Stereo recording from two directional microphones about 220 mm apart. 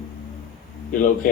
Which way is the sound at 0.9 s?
35° left (ahead or behind).